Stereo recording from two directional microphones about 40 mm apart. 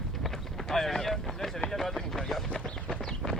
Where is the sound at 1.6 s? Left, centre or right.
Centre.